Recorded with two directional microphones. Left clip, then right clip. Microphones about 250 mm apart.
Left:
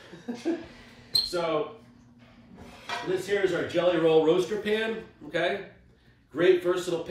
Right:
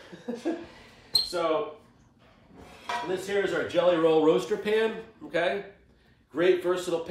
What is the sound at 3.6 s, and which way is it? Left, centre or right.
Speech, centre.